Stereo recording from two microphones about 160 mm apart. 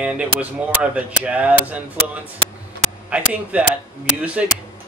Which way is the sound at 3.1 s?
10° right (ahead or behind).